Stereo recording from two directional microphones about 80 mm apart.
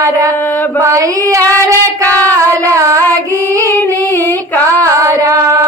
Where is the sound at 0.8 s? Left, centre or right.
Right.